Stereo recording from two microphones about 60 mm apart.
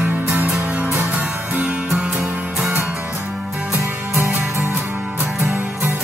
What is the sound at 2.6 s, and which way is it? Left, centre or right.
Music, right.